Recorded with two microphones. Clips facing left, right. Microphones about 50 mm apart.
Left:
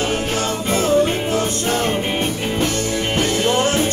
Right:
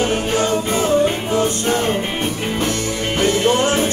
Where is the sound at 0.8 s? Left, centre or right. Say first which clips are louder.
Left 1 dB; centre.